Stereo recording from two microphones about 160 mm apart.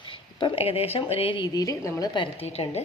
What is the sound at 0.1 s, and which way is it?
A woman's voice, 30° left (ahead or behind).